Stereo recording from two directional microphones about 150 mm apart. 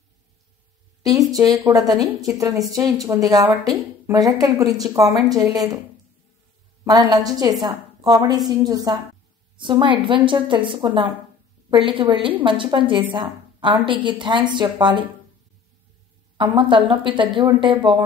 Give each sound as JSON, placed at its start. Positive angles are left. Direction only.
{"t": 1.0, "sound": "a woman's voice", "side_deg": -25}
{"t": 6.8, "sound": "a woman's voice", "side_deg": -25}
{"t": 16.5, "sound": "a woman's voice", "side_deg": -35}